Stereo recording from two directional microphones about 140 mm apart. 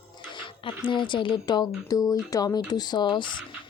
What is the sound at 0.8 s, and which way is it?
Speech, 35° left (ahead or behind).